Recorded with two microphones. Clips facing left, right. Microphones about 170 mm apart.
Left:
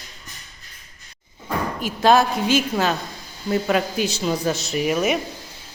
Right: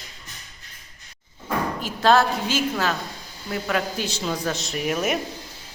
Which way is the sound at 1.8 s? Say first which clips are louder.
Left 2 dB; 15° left (ahead or behind).